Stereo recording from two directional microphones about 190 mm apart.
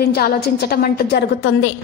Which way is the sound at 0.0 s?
55° left (ahead or behind).